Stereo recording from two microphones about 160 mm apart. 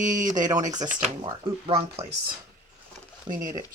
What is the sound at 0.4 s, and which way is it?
Speech, 25° right (ahead or behind).